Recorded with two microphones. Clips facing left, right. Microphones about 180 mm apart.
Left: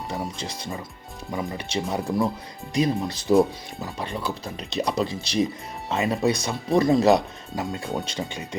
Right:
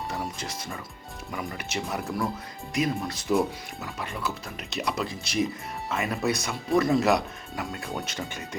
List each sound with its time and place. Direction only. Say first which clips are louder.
1.3 s speech: left 5 dB; 25° left (ahead or behind)
6.4 s speech: left 3 dB; 35° left (ahead or behind); by 8.4 s 15° left (ahead or behind)